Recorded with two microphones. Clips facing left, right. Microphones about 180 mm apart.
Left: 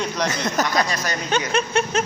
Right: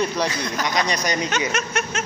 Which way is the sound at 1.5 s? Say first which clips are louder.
Left 5 dB; 30° left (ahead or behind).